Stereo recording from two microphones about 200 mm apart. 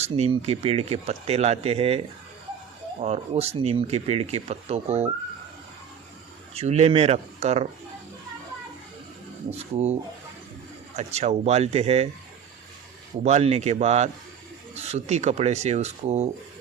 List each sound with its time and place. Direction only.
0.0 s speech: 30° right (ahead or behind)
6.5 s speech: 30° right (ahead or behind)
9.5 s speech: 35° right (ahead or behind)
10.9 s speech: 35° right (ahead or behind)
13.2 s speech: 35° right (ahead or behind)